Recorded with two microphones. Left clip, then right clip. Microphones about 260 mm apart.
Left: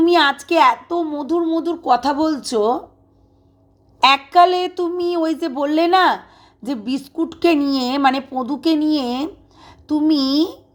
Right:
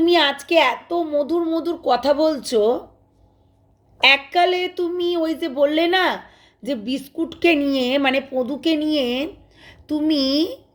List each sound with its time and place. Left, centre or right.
0.0 s a woman's voice: centre
4.0 s a woman's voice: centre